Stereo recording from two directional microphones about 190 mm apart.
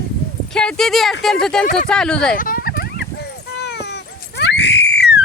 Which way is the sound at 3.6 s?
60° left (ahead or behind).